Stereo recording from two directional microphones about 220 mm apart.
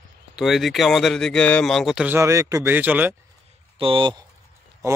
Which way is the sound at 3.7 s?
25° right (ahead or behind).